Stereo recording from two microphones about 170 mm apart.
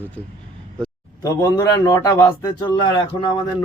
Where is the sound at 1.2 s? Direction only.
20° left (ahead or behind).